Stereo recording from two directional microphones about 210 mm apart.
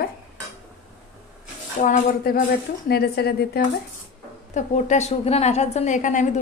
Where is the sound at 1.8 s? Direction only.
45° left (ahead or behind).